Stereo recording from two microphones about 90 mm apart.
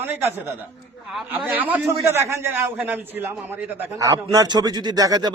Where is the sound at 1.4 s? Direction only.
15° right (ahead or behind).